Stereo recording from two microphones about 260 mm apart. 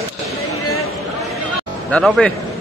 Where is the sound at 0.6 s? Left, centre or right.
Left.